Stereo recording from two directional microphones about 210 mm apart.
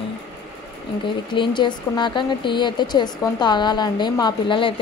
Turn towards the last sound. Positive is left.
turn(degrees=20)  # may be behind; listen again after turning